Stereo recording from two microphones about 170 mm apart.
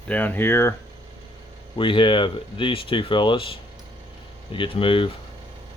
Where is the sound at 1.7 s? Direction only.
30° left (ahead or behind).